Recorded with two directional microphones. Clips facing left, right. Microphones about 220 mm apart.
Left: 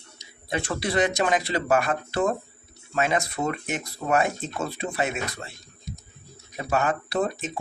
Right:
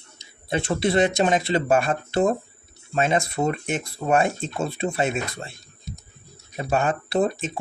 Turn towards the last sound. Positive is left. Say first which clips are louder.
# right 4 dB
turn(degrees=-25)  # may be behind; listen again after turning